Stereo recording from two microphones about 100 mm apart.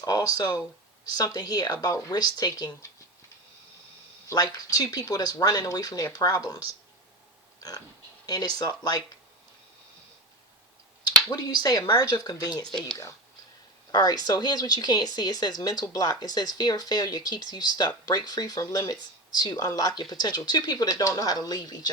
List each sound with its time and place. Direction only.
0.0 s speech: 35° left (ahead or behind)
4.4 s speech: 40° left (ahead or behind)
8.3 s speech: 40° left (ahead or behind)
11.0 s speech: 45° left (ahead or behind)
13.9 s speech: 45° left (ahead or behind)